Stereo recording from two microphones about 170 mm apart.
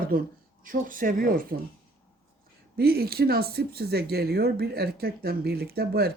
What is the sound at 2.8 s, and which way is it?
Speech, 65° right (ahead or behind).